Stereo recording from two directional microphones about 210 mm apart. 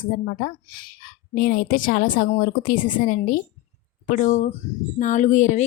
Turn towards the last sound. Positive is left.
turn(degrees=35)  # may be behind; listen again after turning